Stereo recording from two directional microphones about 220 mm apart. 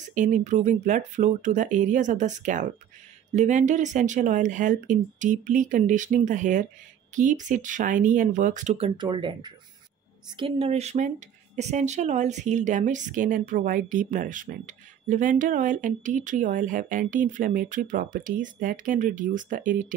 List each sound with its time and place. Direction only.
0.1 s speech: 35° right (ahead or behind)